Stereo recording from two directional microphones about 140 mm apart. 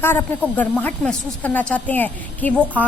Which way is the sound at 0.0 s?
15° left (ahead or behind).